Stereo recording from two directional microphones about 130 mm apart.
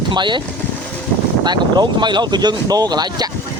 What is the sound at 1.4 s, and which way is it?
Speech, 35° right (ahead or behind).